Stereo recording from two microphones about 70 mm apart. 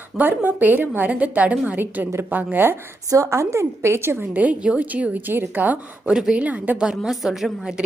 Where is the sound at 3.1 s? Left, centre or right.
Right.